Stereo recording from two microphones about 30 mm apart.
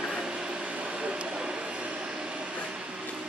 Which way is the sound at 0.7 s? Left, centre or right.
Right.